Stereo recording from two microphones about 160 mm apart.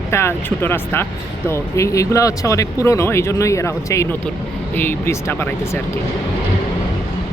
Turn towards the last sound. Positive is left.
turn(degrees=15)  # may be behind; listen again after turning